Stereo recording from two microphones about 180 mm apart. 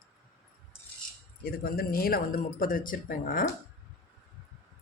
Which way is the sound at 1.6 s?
55° left (ahead or behind).